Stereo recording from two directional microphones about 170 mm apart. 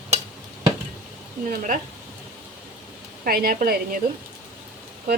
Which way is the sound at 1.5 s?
50° right (ahead or behind).